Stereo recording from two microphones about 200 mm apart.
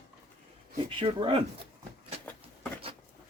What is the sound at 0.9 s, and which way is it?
Speech, 25° right (ahead or behind).